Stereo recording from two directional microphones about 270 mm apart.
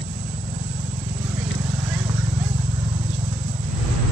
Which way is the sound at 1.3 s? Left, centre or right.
Centre.